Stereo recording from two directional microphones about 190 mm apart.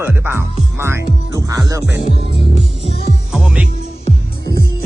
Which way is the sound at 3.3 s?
5° right (ahead or behind).